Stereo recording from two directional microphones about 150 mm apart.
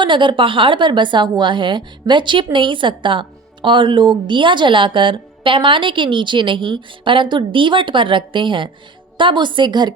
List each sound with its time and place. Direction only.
0.0 s a woman's voice: 30° right (ahead or behind)